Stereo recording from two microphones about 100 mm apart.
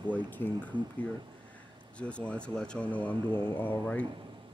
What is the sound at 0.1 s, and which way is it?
Speech, 20° left (ahead or behind).